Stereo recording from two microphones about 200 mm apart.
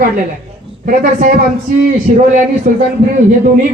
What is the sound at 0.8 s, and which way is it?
Speech, 45° right (ahead or behind).